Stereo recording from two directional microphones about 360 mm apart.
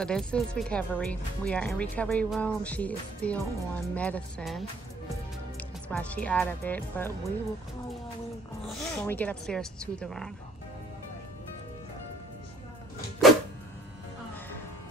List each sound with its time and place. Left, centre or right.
0.0 s speech: centre
5.9 s speech: centre
8.6 s speech: centre